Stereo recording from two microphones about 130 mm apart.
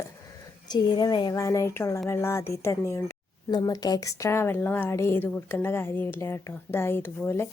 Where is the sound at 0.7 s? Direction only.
30° left (ahead or behind).